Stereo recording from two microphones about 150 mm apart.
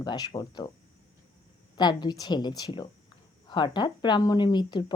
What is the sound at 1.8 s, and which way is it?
Speech, 30° left (ahead or behind).